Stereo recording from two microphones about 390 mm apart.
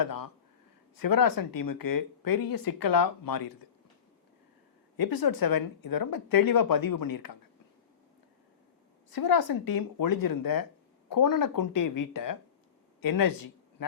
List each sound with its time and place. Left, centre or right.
0.0 s a sound: left
0.9 s speech: left
4.9 s speech: left
9.0 s speech: left